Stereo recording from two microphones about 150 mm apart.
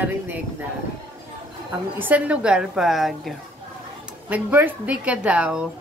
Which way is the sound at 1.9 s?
10° right (ahead or behind).